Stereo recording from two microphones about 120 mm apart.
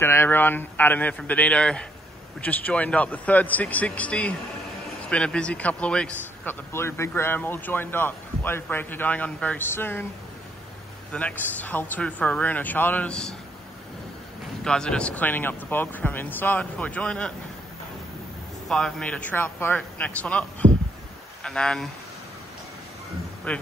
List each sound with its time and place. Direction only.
0.0 s speech: 20° left (ahead or behind)
6.7 s speech: 20° left (ahead or behind)
11.1 s speech: 10° left (ahead or behind)
14.6 s speech: 5° left (ahead or behind)
18.7 s speech: 5° left (ahead or behind)
23.5 s speech: 10° left (ahead or behind)